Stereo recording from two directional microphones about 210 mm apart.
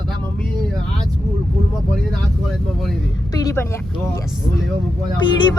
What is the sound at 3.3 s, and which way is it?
Speech, 15° left (ahead or behind).